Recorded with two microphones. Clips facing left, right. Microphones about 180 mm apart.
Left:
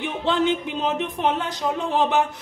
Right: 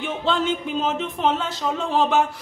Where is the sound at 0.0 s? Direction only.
15° left (ahead or behind).